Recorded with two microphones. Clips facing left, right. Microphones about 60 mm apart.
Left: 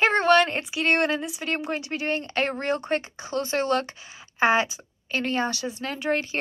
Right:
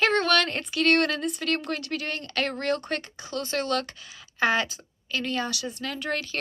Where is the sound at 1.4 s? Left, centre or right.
Left.